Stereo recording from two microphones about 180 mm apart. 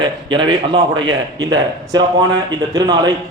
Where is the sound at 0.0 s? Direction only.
25° right (ahead or behind).